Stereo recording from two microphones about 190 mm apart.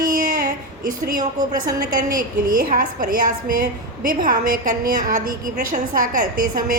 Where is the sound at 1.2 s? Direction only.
20° right (ahead or behind).